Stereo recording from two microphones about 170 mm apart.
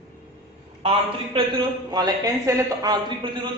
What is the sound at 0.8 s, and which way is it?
Speech, 35° right (ahead or behind).